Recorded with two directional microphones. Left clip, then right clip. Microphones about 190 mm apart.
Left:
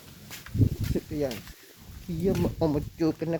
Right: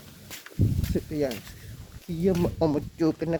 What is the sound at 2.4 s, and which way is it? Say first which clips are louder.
Speech: right 2 dB; 10° right (ahead or behind).